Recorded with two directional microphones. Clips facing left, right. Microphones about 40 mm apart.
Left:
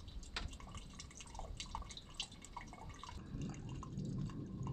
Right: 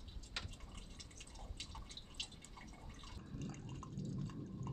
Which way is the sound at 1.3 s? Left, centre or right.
Left.